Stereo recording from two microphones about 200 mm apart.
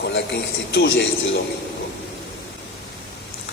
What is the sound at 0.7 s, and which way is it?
Speech, 60° left (ahead or behind).